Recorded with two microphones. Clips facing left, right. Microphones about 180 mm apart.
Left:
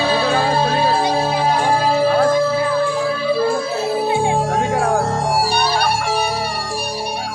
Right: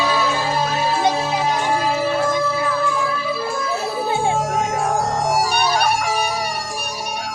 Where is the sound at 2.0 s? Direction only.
35° left (ahead or behind).